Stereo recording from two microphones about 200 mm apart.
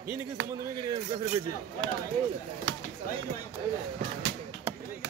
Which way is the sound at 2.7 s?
65° right (ahead or behind).